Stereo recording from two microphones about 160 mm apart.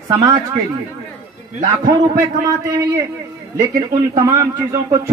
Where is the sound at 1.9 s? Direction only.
25° right (ahead or behind).